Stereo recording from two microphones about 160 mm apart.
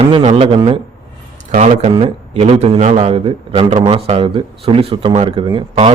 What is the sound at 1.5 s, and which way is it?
A man's voice, 50° right (ahead or behind).